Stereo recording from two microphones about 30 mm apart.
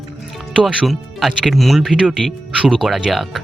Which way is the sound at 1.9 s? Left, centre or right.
Right.